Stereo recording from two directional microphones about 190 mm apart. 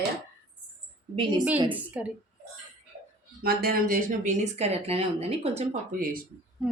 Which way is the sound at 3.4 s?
55° right (ahead or behind).